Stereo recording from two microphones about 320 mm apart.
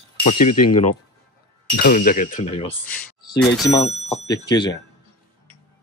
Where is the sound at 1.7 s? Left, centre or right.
Left.